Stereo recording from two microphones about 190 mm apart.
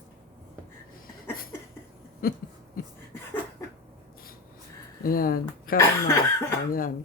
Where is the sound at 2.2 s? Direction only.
50° left (ahead or behind).